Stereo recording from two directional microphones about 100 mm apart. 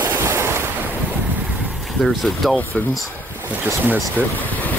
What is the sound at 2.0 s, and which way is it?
Speech, centre (ahead or behind).